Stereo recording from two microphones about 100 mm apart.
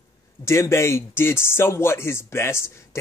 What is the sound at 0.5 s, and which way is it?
Speech, 30° left (ahead or behind).